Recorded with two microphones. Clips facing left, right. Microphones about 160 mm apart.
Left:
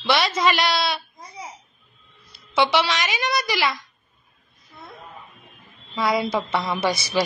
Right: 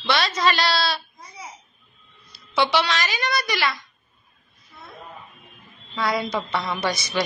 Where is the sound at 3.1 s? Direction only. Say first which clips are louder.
Left 1 dB; 20° left (ahead or behind).